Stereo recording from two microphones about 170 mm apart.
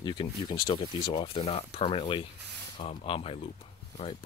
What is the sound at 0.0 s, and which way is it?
Speech, 25° left (ahead or behind).